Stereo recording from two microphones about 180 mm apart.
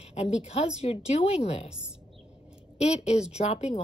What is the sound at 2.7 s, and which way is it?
Speech, 35° left (ahead or behind).